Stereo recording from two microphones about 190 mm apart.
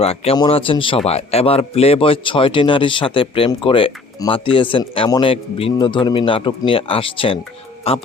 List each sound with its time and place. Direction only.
0.0 s a man's voice: 30° left (ahead or behind)